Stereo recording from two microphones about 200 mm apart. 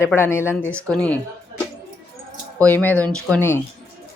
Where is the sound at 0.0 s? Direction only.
10° left (ahead or behind).